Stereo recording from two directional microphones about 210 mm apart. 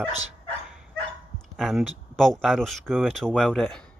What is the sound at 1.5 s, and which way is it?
Speech, centre (ahead or behind).